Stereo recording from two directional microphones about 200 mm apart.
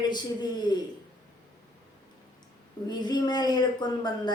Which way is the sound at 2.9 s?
20° left (ahead or behind).